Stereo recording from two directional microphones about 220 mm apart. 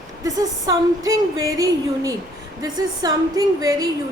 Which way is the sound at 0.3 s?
15° right (ahead or behind).